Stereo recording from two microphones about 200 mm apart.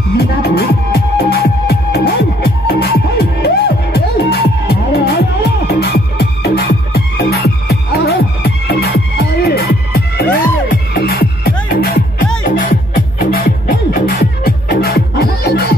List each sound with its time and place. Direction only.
0.2 s music: 50° left (ahead or behind)